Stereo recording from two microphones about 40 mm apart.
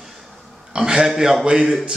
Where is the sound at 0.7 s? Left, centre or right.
Centre.